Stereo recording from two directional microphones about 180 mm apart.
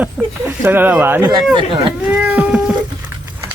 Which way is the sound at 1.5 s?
30° right (ahead or behind).